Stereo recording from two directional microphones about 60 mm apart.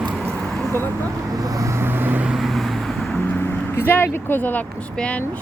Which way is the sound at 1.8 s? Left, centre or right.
Right.